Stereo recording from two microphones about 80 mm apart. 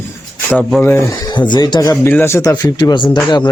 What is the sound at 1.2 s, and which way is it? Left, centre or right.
Speech, left.